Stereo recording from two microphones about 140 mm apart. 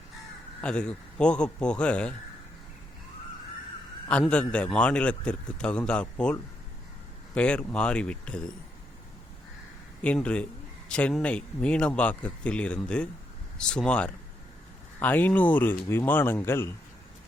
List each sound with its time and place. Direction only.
0.6 s a man's voice: 10° left (ahead or behind)
4.1 s a man's voice: 5° left (ahead or behind)
7.3 s a man's voice: 10° left (ahead or behind)
10.0 s a man's voice: 10° left (ahead or behind)